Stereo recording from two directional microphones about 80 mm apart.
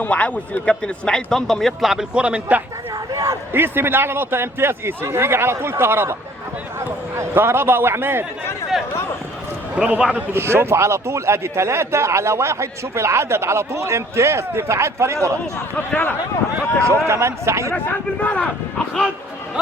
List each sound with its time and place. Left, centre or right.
0.0 s a man's voice: centre
2.1 s a man's voice: centre
3.5 s a man's voice: right
8.7 s a sound: centre
9.7 s a man's voice: centre
10.3 s a man's voice: right
16.8 s a man's voice: right
18.2 s a man's voice: centre